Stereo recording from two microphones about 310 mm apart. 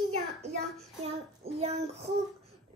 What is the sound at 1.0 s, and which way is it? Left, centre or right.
Child singing, centre.